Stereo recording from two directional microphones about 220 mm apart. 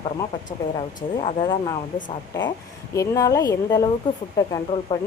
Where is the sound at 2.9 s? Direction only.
15° left (ahead or behind).